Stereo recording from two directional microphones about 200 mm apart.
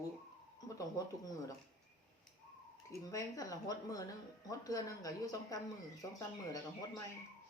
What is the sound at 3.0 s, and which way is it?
Speech, 15° left (ahead or behind).